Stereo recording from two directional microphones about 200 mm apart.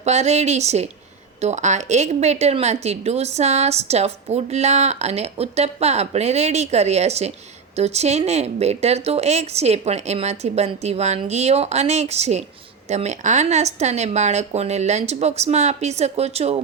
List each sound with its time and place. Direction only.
0.0 s speech: 35° right (ahead or behind)